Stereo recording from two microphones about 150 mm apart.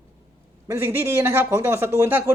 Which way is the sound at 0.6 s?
15° right (ahead or behind).